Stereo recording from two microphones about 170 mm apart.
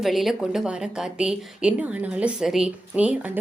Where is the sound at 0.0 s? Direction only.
Centre (ahead or behind).